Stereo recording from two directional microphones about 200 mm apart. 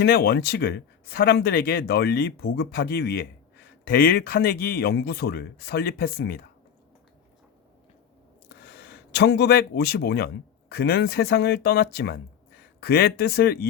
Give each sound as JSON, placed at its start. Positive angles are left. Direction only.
{"t": 0.0, "sound": "speech", "side_deg": 55}
{"t": 8.4, "sound": "speech", "side_deg": 55}